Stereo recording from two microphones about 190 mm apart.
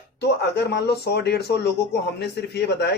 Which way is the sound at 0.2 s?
55° left (ahead or behind).